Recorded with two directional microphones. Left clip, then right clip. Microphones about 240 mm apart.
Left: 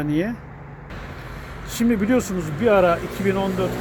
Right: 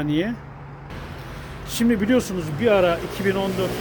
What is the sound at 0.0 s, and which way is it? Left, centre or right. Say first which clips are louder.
Speech: even; centre.